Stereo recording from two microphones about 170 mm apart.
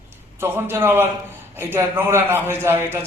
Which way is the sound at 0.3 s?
15° right (ahead or behind).